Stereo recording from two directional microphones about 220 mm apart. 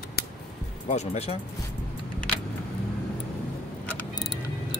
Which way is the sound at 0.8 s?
30° left (ahead or behind).